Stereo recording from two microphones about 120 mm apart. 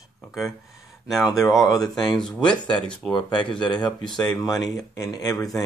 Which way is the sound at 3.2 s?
40° left (ahead or behind).